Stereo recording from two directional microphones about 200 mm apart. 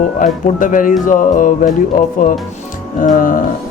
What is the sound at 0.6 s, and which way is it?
Speech, 40° left (ahead or behind).